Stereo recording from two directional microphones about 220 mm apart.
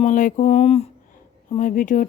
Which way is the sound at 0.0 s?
35° left (ahead or behind).